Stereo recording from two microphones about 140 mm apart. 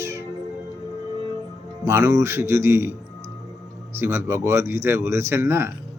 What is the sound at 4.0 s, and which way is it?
Speech, 20° right (ahead or behind).